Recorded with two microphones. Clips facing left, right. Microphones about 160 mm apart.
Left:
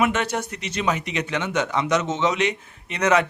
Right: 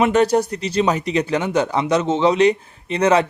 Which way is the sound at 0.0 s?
35° right (ahead or behind).